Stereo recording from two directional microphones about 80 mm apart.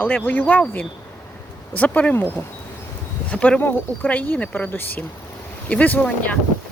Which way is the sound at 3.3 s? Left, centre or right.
Centre.